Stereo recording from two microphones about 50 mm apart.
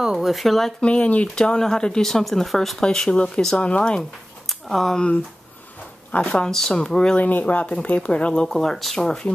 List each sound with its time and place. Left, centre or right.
0.0 s speech: centre
0.3 s speech: centre
0.7 s speech: left; by 2.8 s centre
2.8 s speech: centre
4.5 s speech: centre
6.3 s speech: centre
7.2 s speech: left; by 9.3 s centre